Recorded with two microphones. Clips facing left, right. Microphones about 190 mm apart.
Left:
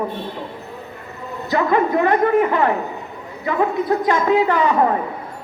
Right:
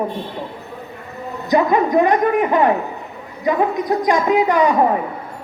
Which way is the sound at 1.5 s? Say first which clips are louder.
Right 3 dB; 15° right (ahead or behind).